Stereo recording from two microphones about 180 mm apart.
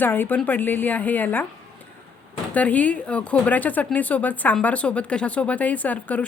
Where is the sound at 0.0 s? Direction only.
10° left (ahead or behind).